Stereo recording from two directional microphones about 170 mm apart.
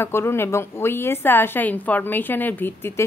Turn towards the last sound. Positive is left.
turn(degrees=15)  # may be behind; listen again after turning